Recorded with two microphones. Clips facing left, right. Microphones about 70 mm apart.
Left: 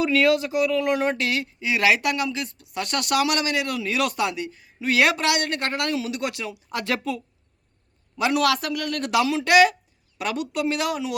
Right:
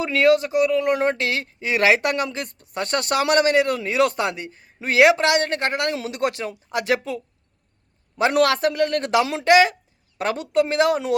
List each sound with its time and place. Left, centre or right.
0.0 s speech: right
4.9 s a man's voice: right
6.0 s speech: right
6.7 s a man's voice: centre
8.1 s a man's voice: right